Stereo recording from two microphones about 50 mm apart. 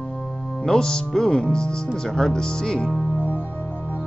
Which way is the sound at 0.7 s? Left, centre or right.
Centre.